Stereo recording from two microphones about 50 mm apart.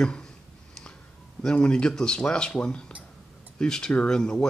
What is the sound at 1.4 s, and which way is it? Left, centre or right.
Speech, centre.